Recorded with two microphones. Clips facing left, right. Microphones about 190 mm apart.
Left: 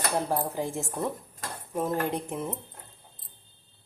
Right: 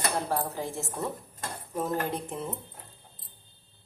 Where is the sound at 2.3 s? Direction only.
10° left (ahead or behind).